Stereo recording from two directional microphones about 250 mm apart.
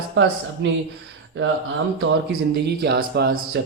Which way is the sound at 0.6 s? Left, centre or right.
Right.